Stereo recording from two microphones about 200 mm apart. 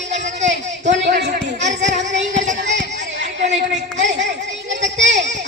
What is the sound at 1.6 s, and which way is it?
Child singing, 35° right (ahead or behind).